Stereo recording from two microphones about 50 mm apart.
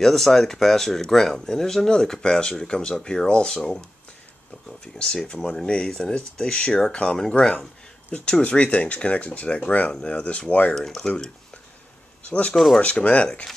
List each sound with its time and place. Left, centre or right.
0.0 s speech: centre
5.3 s speech: centre
10.7 s speech: centre; by 12.5 s left
12.5 s speech: centre
12.8 s speech: left